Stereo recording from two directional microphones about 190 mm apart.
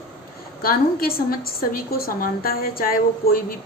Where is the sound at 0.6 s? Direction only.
50° left (ahead or behind).